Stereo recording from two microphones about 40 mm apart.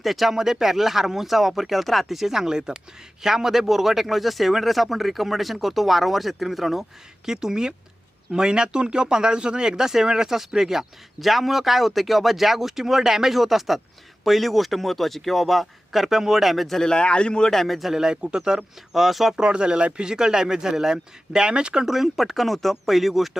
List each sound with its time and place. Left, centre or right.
0.0 s speech: centre
7.3 s speech: centre
16.8 s a man's voice: left
17.5 s speech: centre
17.9 s a man's voice: centre
18.9 s speech: centre
19.4 s a man's voice: right
21.9 s speech: centre